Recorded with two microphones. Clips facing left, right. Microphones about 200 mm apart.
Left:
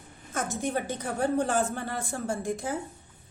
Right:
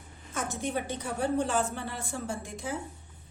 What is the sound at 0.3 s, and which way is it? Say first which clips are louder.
A woman's voice: left 2 dB; 45° left (ahead or behind).